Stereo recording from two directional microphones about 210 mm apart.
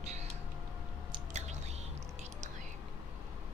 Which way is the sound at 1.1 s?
35° right (ahead or behind).